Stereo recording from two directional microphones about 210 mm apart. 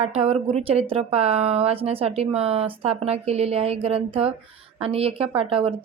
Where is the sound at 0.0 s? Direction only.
30° right (ahead or behind).